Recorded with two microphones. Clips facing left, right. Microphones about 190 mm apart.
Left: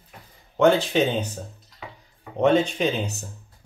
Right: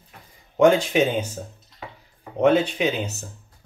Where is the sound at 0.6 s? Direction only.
15° right (ahead or behind).